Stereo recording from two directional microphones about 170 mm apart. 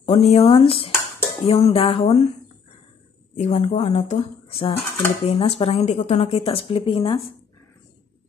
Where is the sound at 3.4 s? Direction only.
40° left (ahead or behind).